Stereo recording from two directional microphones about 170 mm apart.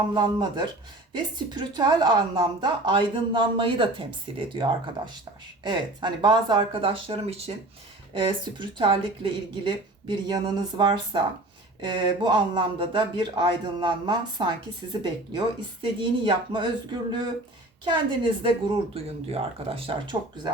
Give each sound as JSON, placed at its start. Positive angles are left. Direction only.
{"t": 0.1, "sound": "a woman's voice", "side_deg": -25}
{"t": 17.8, "sound": "a woman's voice", "side_deg": -25}